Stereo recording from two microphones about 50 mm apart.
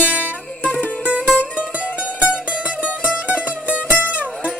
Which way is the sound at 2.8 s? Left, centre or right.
Right.